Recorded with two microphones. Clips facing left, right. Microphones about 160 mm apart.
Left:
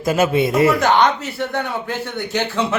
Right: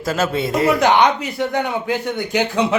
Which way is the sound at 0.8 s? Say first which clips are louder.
Right 1 dB; 15° right (ahead or behind).